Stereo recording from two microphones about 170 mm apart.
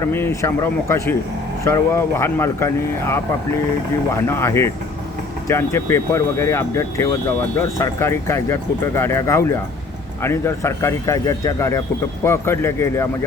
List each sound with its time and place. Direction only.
0.0 s speech: 15° left (ahead or behind)